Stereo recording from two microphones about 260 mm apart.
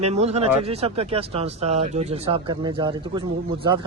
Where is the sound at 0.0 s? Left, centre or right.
Right.